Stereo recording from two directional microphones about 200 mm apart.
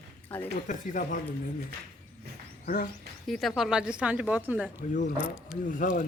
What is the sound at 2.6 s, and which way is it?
Speech, 45° left (ahead or behind).